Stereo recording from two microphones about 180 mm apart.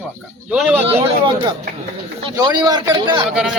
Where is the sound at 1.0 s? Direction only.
30° right (ahead or behind).